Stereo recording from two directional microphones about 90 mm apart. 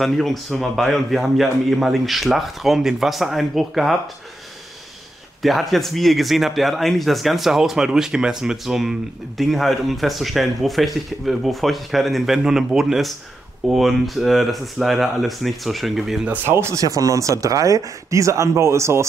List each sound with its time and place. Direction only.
0.0 s a man's voice: centre (ahead or behind)
5.4 s a man's voice: centre (ahead or behind)
16.3 s speech: 30° right (ahead or behind)